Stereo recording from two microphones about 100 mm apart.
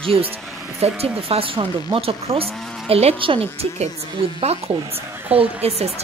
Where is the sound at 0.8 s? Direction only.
80° right.